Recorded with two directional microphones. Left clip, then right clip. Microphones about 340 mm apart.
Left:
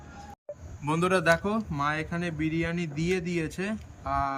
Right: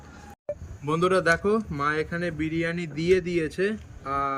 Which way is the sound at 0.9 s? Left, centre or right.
Centre.